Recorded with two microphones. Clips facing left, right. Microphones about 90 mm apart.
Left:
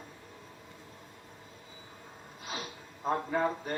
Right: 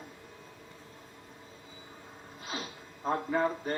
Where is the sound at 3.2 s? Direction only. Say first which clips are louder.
Right 1 dB; centre (ahead or behind).